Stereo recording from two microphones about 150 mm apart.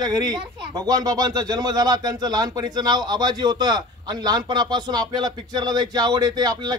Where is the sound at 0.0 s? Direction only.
25° right (ahead or behind).